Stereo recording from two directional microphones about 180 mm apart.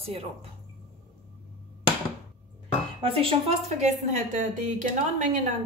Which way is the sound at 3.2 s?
35° right (ahead or behind).